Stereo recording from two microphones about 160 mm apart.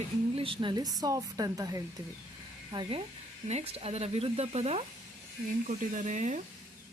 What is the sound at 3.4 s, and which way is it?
Speech, 40° right (ahead or behind).